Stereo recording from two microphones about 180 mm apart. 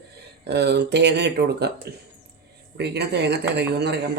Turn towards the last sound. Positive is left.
turn(degrees=-65)  # may be behind; listen again after turning